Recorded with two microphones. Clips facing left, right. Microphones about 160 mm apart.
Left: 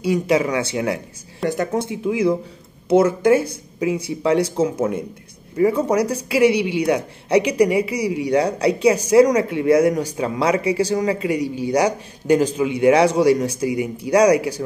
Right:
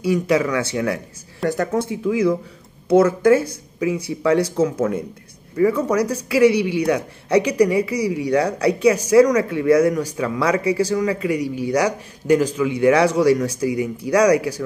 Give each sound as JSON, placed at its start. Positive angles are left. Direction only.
{"t": 0.0, "sound": "speech", "side_deg": 25}